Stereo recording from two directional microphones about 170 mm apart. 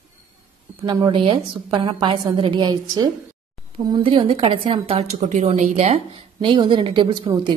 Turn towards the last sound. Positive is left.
turn(degrees=-30)  # may be behind; listen again after turning